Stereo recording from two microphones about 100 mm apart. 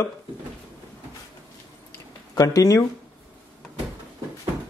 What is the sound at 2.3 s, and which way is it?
Speech, 35° left (ahead or behind).